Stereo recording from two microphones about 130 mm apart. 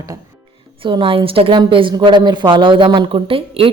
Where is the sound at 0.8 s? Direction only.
40° right (ahead or behind).